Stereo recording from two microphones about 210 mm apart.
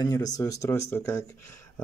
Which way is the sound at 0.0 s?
20° left (ahead or behind).